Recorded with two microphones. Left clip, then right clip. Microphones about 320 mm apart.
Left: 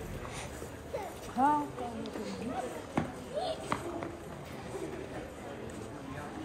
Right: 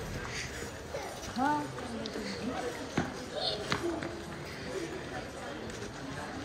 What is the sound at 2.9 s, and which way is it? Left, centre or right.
Basketball bounce, left.